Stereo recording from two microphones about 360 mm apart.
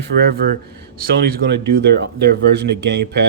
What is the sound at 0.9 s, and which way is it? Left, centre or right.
Speech, right.